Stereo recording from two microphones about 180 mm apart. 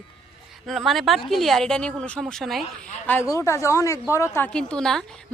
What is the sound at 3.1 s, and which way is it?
Speech, 15° left (ahead or behind).